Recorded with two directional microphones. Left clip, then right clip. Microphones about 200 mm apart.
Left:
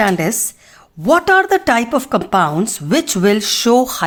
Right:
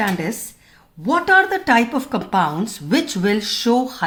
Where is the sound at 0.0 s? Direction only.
50° left (ahead or behind).